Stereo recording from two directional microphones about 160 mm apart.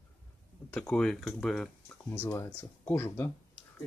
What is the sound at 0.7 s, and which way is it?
Speech, 5° left (ahead or behind).